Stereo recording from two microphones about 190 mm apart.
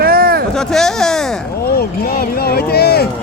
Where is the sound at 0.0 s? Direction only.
50° right (ahead or behind).